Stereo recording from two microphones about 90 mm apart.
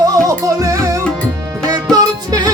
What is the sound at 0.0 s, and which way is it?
Music, 40° right (ahead or behind).